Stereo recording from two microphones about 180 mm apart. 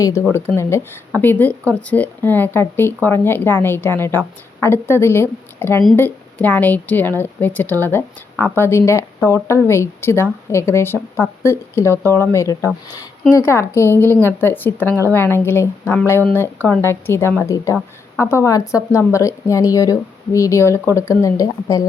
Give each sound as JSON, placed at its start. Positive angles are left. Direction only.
{"t": 0.0, "sound": "speech", "side_deg": 15}